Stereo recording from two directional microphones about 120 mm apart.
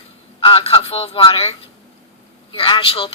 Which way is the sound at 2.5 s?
45° left (ahead or behind).